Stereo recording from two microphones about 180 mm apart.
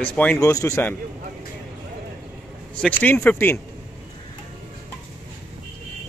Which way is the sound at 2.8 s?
10° left (ahead or behind).